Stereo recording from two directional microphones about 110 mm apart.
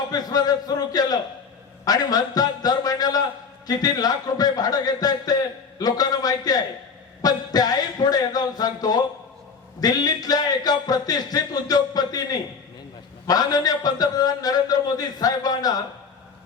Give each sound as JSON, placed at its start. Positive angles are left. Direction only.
{"t": 0.1, "sound": "a man's voice", "side_deg": 35}